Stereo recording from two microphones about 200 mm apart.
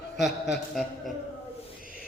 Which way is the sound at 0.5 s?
Centre (ahead or behind).